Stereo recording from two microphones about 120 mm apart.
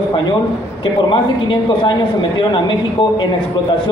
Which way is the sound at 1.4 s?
40° left (ahead or behind).